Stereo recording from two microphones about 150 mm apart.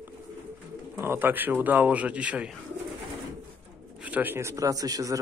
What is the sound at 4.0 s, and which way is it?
A man's voice, 10° right (ahead or behind).